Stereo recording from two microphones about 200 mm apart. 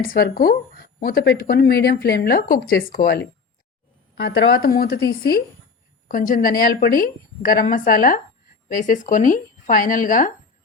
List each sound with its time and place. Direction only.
0.0 s a woman's voice: 50° left (ahead or behind)